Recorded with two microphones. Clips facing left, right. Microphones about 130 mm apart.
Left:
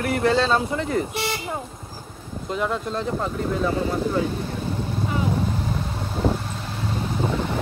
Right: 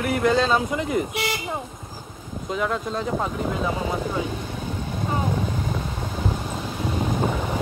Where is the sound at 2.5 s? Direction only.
Centre (ahead or behind).